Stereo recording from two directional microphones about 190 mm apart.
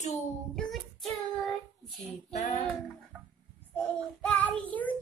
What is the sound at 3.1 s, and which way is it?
Music, 5° right (ahead or behind).